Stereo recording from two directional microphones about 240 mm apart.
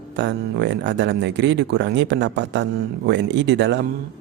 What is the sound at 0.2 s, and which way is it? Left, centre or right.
Speech, right.